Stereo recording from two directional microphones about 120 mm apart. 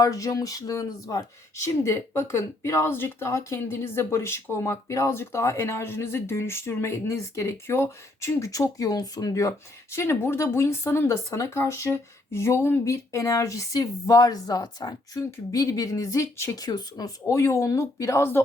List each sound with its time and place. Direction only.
0.0 s speech: 30° left (ahead or behind)